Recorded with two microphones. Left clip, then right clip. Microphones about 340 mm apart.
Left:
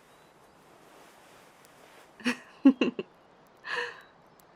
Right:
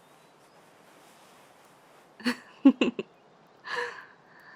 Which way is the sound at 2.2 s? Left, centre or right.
Centre.